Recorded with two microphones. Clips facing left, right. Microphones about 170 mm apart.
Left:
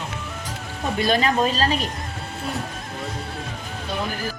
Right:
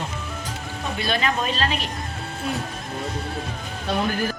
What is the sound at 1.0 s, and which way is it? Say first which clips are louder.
Speech: left 5 dB; 40° left (ahead or behind).